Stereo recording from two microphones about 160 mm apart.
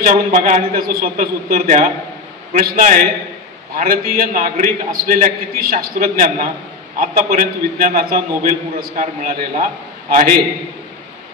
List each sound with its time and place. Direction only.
0.0 s a man's voice: 55° right (ahead or behind)